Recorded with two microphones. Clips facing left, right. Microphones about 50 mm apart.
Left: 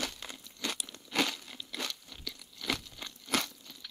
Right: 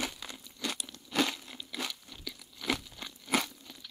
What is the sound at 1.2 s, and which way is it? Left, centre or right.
Crunch, centre.